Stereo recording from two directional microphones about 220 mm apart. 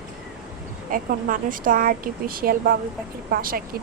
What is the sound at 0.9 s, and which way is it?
A woman's voice, 40° right (ahead or behind).